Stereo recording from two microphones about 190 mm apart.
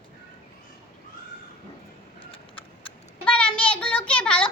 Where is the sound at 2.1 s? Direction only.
30° left (ahead or behind).